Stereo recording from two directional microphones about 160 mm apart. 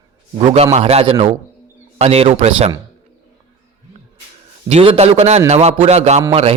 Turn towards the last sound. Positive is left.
turn(degrees=-45)  # may be behind; listen again after turning